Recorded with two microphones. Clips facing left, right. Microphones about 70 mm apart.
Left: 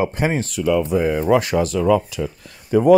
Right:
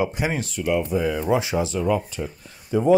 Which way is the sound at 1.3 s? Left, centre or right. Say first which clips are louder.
Left 6 dB; left.